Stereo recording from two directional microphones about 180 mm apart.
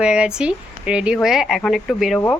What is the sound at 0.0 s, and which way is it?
Speech, 5° right (ahead or behind).